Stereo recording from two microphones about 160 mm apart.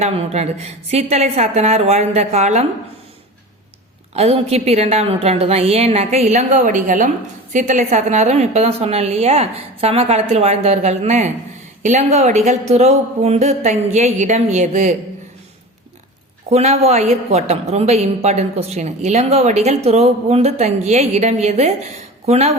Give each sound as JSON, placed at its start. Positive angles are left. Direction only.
{"t": 0.0, "sound": "a woman's voice", "side_deg": -40}
{"t": 4.1, "sound": "a woman's voice", "side_deg": -40}
{"t": 16.5, "sound": "a woman's voice", "side_deg": -40}